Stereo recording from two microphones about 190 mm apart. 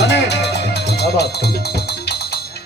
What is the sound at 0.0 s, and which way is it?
Music, 65° left (ahead or behind).